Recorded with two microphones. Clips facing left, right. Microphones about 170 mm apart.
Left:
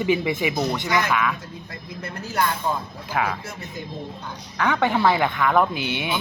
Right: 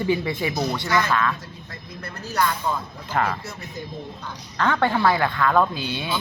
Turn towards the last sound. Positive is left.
turn(degrees=20)  # may be behind; listen again after turning